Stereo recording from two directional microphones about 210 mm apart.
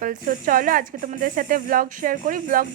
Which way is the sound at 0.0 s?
40° right (ahead or behind).